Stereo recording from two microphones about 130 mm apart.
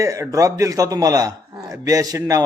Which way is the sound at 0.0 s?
25° right (ahead or behind).